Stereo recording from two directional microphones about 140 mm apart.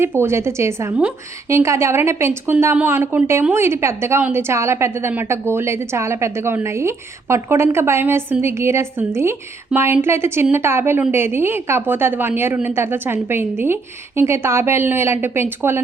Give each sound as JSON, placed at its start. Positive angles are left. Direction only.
{"t": 0.0, "sound": "a woman's voice", "side_deg": -20}